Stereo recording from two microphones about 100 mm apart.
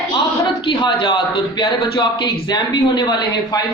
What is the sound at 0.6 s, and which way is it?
A man's voice, 55° left (ahead or behind).